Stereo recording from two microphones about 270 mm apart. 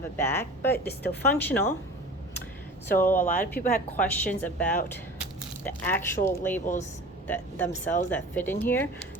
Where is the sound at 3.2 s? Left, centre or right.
Left.